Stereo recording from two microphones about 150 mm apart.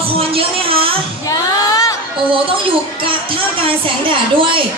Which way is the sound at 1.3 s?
20° left (ahead or behind).